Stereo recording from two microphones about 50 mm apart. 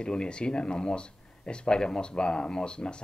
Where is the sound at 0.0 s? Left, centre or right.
Centre.